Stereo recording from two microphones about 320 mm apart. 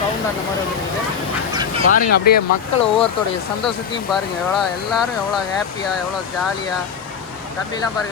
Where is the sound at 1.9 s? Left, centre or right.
Left.